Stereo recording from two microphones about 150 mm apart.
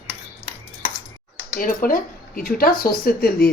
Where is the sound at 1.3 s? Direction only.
65° left (ahead or behind).